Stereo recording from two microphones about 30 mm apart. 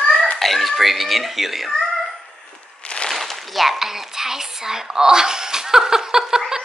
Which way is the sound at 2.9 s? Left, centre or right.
Left.